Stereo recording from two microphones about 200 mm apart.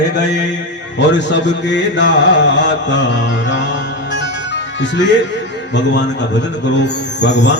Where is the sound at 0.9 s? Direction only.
60° left (ahead or behind).